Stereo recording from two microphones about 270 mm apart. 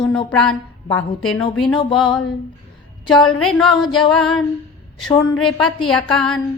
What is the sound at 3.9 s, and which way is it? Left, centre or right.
Speech, centre.